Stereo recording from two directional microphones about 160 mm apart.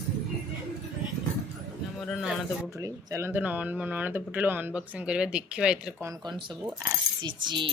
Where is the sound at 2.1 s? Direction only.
5° right (ahead or behind).